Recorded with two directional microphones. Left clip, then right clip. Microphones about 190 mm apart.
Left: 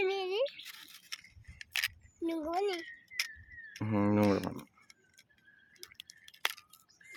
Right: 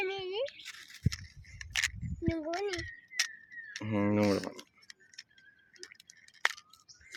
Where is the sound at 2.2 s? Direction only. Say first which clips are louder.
Right 1 dB; 55° left (ahead or behind).